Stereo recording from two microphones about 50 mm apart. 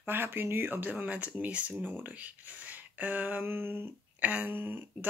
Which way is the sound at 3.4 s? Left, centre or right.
Right.